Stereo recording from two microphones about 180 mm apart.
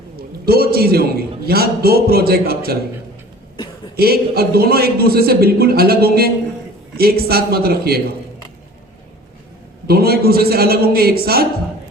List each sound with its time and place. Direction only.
0.2 s a man's voice: 60° right (ahead or behind)
3.9 s a man's voice: 60° right (ahead or behind)
9.8 s a man's voice: 60° right (ahead or behind)